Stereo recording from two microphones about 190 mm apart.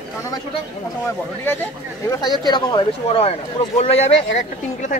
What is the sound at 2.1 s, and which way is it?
Speech, 20° left (ahead or behind).